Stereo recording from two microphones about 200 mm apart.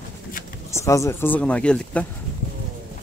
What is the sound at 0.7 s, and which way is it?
Speech, 15° left (ahead or behind).